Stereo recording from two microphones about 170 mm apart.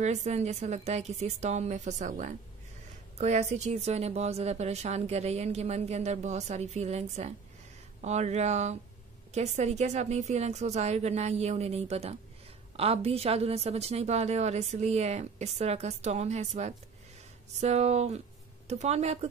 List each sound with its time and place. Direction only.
0.0 s a woman's voice: 40° right (ahead or behind)